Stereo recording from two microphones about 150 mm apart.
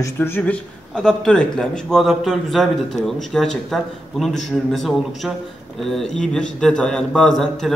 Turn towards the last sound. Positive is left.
turn(degrees=0)  # may be behind; listen again after turning